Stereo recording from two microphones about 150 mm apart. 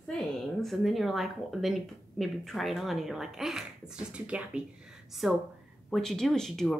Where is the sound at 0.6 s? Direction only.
Centre (ahead or behind).